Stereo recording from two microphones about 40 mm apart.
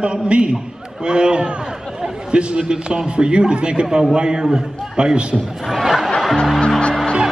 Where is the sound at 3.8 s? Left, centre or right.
Centre.